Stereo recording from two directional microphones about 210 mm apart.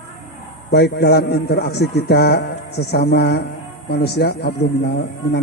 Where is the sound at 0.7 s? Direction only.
50° left (ahead or behind).